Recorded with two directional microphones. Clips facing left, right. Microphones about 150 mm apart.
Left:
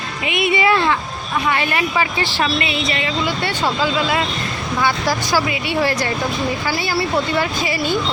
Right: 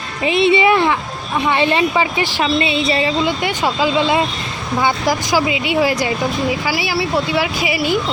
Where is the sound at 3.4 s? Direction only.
15° right (ahead or behind).